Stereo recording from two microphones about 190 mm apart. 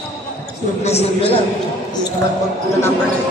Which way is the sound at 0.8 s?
35° left (ahead or behind).